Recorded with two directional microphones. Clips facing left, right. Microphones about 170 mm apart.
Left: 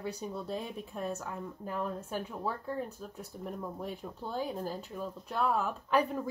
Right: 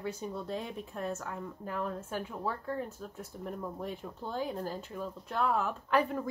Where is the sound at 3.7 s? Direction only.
10° left (ahead or behind).